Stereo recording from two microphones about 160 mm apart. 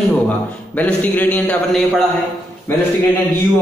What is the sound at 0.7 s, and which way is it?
A man's voice, 10° left (ahead or behind).